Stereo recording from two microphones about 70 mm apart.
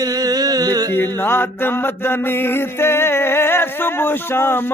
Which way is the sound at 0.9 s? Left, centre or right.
Left.